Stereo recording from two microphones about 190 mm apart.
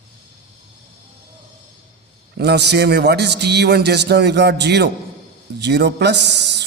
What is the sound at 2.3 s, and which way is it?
A man's voice, 60° right (ahead or behind).